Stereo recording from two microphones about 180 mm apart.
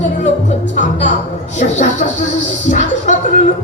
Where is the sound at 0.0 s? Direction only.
40° left (ahead or behind).